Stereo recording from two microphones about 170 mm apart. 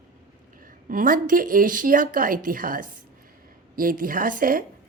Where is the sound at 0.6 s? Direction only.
55° right (ahead or behind).